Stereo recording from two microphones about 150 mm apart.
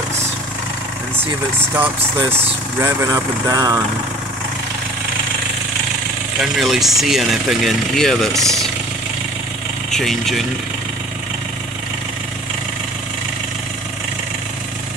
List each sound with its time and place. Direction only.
2.3 s speech: 20° right (ahead or behind)
6.4 s speech: centre (ahead or behind)
9.8 s speech: centre (ahead or behind)